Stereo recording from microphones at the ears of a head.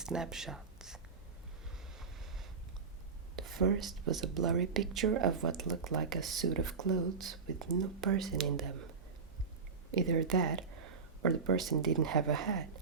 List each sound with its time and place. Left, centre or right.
3.3 s speech: right